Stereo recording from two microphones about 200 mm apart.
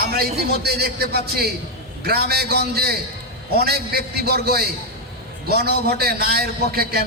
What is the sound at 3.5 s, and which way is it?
A man's voice, 50° right (ahead or behind).